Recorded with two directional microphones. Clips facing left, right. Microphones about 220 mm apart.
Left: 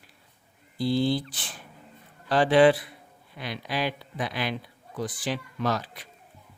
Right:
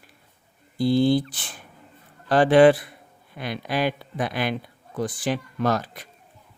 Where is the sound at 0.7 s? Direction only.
50° right (ahead or behind).